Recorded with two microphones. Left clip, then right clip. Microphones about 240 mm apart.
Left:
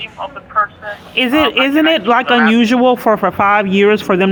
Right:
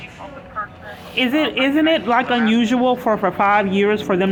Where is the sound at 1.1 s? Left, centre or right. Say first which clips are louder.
Left 6 dB; left.